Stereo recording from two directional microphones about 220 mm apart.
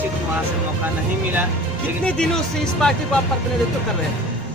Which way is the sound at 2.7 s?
Centre (ahead or behind).